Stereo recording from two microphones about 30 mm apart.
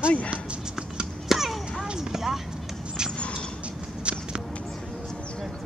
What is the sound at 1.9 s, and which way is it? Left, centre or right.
Vehicle, centre.